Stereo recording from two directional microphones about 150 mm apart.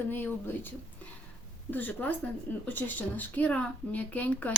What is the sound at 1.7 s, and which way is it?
A woman's voice, 10° left (ahead or behind).